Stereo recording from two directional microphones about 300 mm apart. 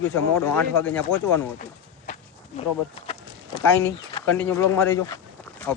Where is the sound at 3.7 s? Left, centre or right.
Centre.